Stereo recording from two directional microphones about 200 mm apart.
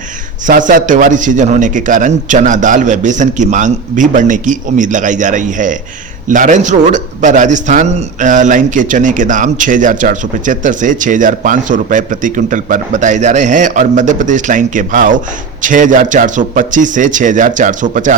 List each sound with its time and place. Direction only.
0.4 s a man's voice: 40° right (ahead or behind)